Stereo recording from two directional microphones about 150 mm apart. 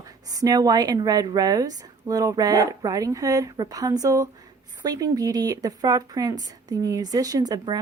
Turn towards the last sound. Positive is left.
turn(degrees=-25)  # may be behind; listen again after turning